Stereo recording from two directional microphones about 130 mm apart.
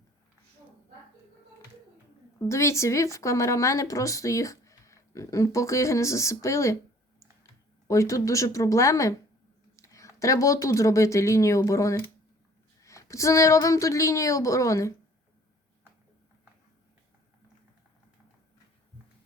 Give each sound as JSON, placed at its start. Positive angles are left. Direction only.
{"t": 2.4, "sound": "speech", "side_deg": 20}
{"t": 7.9, "sound": "speech", "side_deg": 25}